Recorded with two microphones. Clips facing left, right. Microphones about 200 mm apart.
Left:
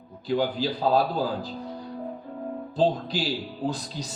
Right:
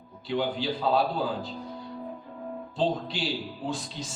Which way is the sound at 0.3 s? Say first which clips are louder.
Left 3 dB; 40° left (ahead or behind).